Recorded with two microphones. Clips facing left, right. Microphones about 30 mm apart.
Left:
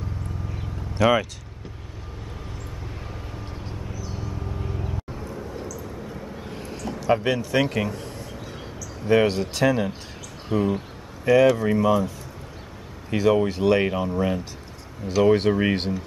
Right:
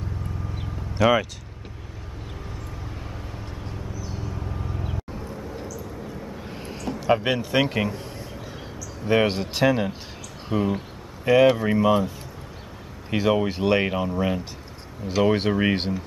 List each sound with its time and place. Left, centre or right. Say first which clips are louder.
0.9 s speech: even; centre
4.6 s vehicle: left 1 dB; centre
5.1 s a sound: left 1 dB; centre
6.0 s vehicle: even; centre
6.6 s a sound: right 1 dB; centre
9.1 s speech: left 2 dB; centre
13.1 s speech: left 2 dB; centre